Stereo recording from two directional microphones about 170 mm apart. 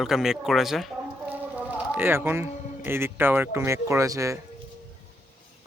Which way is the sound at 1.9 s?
15° right (ahead or behind).